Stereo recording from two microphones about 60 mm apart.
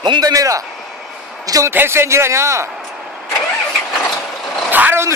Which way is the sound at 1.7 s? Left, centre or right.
Right.